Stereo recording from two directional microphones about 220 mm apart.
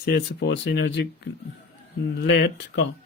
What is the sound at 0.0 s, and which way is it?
Speech, 45° left (ahead or behind).